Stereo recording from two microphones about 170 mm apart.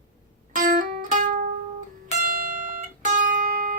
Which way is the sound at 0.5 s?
50° right (ahead or behind).